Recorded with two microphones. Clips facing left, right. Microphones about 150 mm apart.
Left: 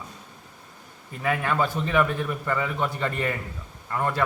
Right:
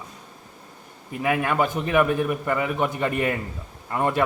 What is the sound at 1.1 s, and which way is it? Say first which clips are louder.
A man's voice: right 3 dB; 10° right (ahead or behind).